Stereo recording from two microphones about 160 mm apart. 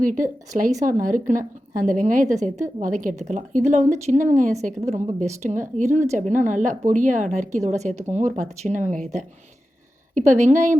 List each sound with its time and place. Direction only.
0.0 s a woman's voice: 55° right (ahead or behind)
10.2 s a woman's voice: 45° right (ahead or behind)